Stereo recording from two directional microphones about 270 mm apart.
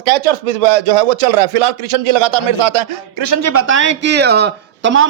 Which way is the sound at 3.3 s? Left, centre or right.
Right.